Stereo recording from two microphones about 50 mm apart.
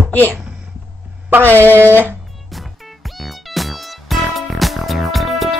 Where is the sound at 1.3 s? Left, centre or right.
Right.